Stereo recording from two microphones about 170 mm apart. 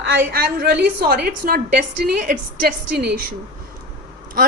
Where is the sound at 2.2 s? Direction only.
50° right (ahead or behind).